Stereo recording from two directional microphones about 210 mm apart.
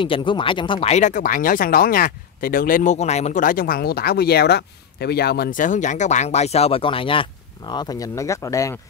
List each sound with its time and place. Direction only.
0.0 s speech: 25° left (ahead or behind)